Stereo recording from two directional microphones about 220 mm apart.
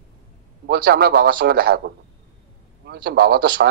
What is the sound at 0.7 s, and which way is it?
A man's voice, 45° right (ahead or behind).